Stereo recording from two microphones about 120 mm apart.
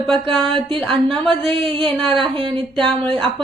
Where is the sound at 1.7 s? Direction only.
45° right (ahead or behind).